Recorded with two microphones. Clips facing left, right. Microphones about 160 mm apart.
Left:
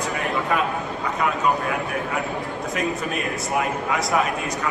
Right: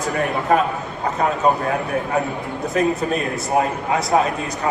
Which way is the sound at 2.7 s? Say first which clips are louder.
Right 7 dB; 35° right (ahead or behind).